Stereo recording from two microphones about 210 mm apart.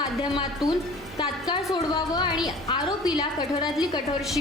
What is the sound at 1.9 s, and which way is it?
A woman's voice, 20° left (ahead or behind).